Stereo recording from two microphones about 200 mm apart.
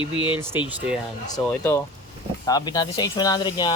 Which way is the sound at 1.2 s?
15° left (ahead or behind).